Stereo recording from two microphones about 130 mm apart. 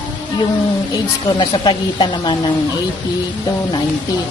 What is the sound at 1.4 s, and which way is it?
Speech, 35° left (ahead or behind).